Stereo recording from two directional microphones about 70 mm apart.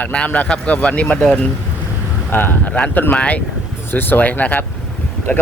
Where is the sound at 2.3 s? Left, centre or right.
Left.